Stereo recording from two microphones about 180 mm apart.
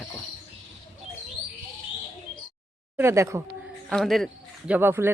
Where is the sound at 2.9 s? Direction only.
15° right (ahead or behind).